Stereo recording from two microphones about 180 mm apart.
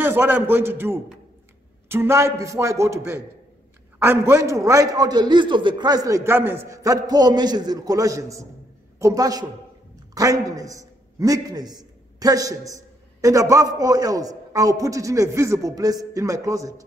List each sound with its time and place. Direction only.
0.0 s a man's voice: 10° right (ahead or behind)